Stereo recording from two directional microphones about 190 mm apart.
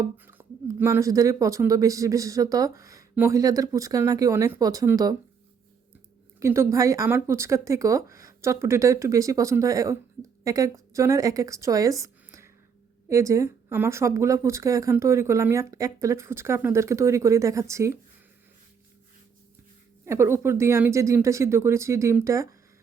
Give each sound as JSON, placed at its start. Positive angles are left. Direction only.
{"t": 0.0, "sound": "speech", "side_deg": -15}
{"t": 6.4, "sound": "speech", "side_deg": -15}
{"t": 20.1, "sound": "speech", "side_deg": -15}